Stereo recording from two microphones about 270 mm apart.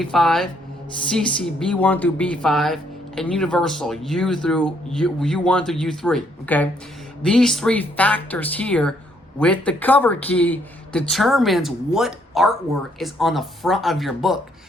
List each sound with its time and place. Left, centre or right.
0.0 s speech: centre